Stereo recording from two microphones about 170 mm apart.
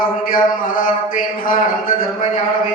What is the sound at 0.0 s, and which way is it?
A man's voice, 55° left (ahead or behind).